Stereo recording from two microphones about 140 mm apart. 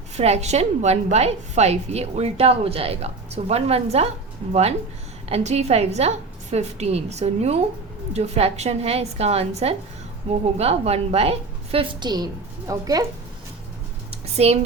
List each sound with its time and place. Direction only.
0.2 s a woman's voice: 50° right (ahead or behind)
5.3 s a woman's voice: 50° right (ahead or behind); by 13.1 s 25° right (ahead or behind)
14.3 s a woman's voice: 50° right (ahead or behind)